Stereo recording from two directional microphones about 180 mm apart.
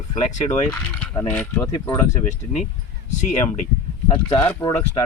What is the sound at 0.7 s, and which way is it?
Mechanisms, 5° left (ahead or behind).